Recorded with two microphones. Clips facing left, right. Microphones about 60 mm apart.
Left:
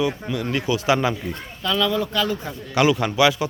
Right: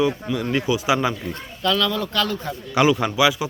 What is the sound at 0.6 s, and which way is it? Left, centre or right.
Speech, centre.